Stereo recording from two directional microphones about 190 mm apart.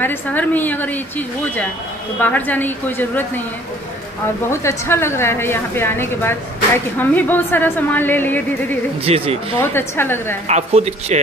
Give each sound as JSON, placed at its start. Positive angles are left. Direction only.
{"t": 0.0, "sound": "a woman's voice", "side_deg": 10}
{"t": 4.5, "sound": "a woman's voice", "side_deg": 15}
{"t": 9.0, "sound": "speech", "side_deg": -30}
{"t": 9.6, "sound": "a woman's voice", "side_deg": 10}
{"t": 10.5, "sound": "speech", "side_deg": -35}